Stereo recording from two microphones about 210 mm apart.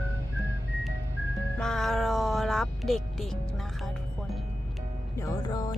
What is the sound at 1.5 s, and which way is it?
Music, centre (ahead or behind).